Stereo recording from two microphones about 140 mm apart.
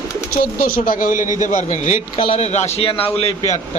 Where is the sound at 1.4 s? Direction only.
60° left (ahead or behind); by 3.3 s 45° left (ahead or behind).